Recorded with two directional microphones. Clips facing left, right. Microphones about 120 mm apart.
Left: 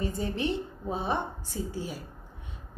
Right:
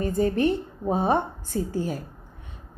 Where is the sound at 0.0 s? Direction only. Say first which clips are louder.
Right 8 dB; 50° right (ahead or behind).